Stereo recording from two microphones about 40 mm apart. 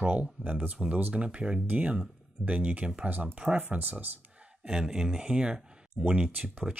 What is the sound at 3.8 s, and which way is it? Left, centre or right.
Speech, right.